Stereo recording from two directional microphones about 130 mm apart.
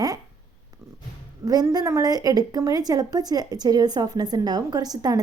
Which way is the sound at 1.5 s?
30° right (ahead or behind).